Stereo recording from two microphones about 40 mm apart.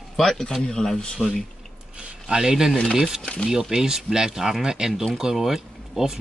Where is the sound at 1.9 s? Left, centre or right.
Centre.